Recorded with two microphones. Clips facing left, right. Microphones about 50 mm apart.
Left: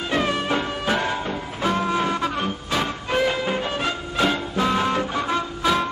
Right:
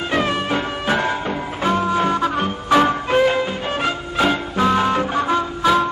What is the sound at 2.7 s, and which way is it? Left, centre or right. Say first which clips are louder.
Music: right 12 dB; right.